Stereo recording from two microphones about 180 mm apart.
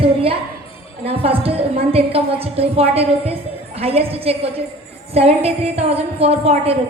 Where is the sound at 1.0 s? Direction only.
30° right (ahead or behind).